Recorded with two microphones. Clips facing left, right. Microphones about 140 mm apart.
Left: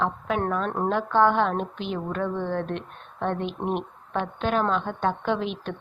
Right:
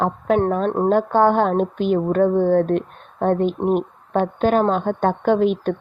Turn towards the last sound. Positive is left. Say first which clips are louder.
# right 10 dB
turn(degrees=-45)  # may be behind; listen again after turning